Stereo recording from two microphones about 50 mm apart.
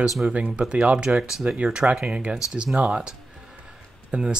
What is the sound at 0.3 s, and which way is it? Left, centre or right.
Speech, right.